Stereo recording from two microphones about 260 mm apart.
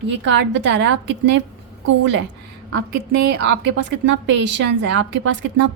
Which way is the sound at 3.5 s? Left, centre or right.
Right.